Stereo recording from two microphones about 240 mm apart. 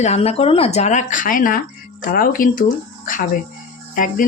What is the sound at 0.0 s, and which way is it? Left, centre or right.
Speech, left.